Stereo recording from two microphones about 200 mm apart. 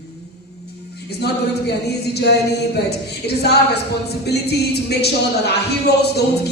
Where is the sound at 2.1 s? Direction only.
55° left (ahead or behind).